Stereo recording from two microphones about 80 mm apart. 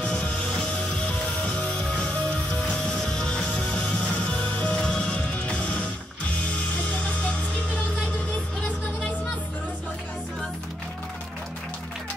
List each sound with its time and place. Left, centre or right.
0.0 s music: centre
8.5 s vehicle: centre